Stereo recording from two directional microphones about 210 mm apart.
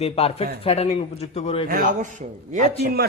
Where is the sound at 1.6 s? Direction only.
40° right (ahead or behind).